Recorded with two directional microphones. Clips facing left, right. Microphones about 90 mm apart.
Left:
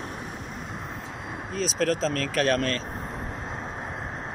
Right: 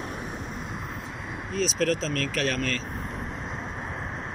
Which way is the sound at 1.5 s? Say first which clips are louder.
Even; 35° left (ahead or behind).